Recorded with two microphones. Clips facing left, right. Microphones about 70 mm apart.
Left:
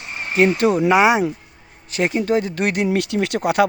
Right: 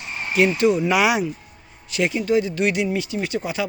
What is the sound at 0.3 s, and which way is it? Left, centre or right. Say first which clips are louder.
Speech: left 2 dB; left.